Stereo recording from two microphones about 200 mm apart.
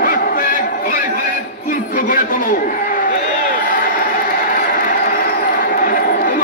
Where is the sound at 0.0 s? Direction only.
45° left (ahead or behind).